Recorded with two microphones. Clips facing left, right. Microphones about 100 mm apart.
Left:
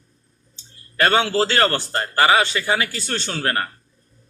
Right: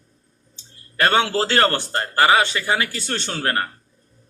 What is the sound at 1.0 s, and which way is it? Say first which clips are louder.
Speech: left 1 dB; 5° left (ahead or behind).